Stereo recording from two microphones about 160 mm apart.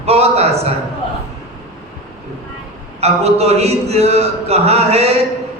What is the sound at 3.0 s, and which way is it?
A man's voice, 40° right (ahead or behind).